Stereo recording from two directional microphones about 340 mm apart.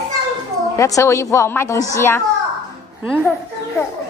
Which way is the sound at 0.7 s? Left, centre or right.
Centre.